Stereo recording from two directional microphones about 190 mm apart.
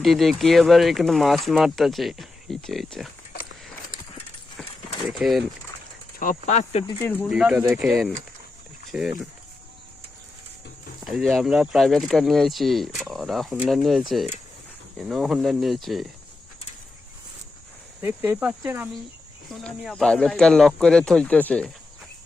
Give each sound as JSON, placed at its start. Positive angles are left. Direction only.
{"t": 0.0, "sound": "speech", "side_deg": 0}
{"t": 5.2, "sound": "speech", "side_deg": -5}
{"t": 6.1, "sound": "speech", "side_deg": 45}
{"t": 7.0, "sound": "speech", "side_deg": 10}
{"t": 7.3, "sound": "speech", "side_deg": -5}
{"t": 11.0, "sound": "speech", "side_deg": 0}
{"t": 18.0, "sound": "speech", "side_deg": -10}
{"t": 19.5, "sound": "speech", "side_deg": 0}